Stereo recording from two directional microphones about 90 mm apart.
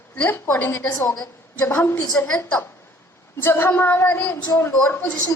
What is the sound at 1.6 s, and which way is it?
Speech, 25° left (ahead or behind).